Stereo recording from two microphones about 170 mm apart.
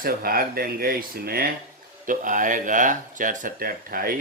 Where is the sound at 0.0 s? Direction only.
60° right (ahead or behind).